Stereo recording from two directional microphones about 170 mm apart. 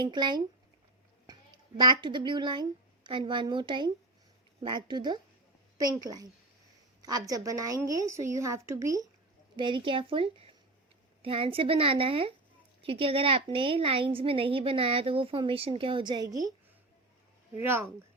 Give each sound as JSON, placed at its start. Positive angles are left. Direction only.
{"t": 0.0, "sound": "a woman's voice", "side_deg": -25}
{"t": 1.8, "sound": "a woman's voice", "side_deg": -25}
{"t": 9.6, "sound": "a woman's voice", "side_deg": -30}
{"t": 17.6, "sound": "speech", "side_deg": -15}